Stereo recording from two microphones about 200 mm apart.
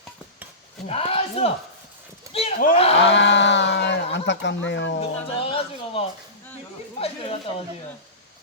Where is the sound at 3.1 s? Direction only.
65° left (ahead or behind).